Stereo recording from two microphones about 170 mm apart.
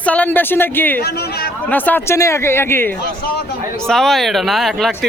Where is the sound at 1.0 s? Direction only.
65° left (ahead or behind).